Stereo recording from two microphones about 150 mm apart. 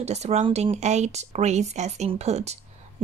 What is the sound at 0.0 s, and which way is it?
A woman's voice, 45° right (ahead or behind).